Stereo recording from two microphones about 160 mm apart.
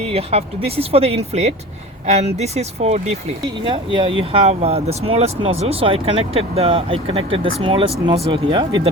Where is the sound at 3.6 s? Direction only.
30° right (ahead or behind).